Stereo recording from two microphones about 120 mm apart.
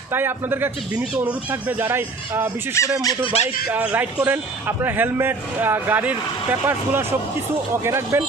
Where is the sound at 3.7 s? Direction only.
10° right (ahead or behind).